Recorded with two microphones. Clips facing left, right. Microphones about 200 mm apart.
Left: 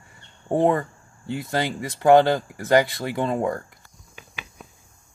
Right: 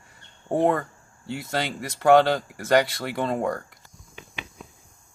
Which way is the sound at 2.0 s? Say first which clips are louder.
Left 2 dB; centre (ahead or behind).